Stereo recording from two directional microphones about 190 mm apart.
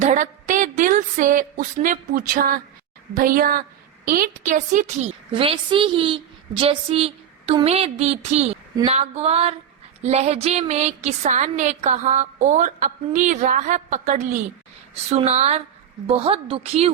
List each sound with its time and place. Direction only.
0.0 s a woman's voice: 40° right (ahead or behind)
5.3 s a woman's voice: 30° right (ahead or behind)